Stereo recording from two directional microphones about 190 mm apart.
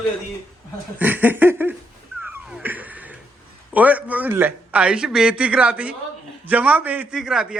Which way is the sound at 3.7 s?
10° right (ahead or behind).